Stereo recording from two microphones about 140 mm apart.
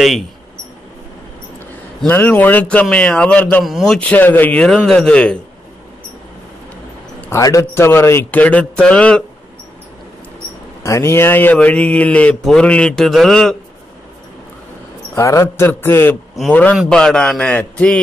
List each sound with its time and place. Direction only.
2.0 s speech: 15° left (ahead or behind)
7.2 s speech: 20° left (ahead or behind)
10.8 s speech: 20° left (ahead or behind); by 13.6 s 5° left (ahead or behind)
15.1 s speech: 20° left (ahead or behind)